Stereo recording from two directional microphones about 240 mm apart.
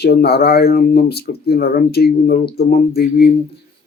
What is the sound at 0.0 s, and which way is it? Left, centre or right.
Speech, left.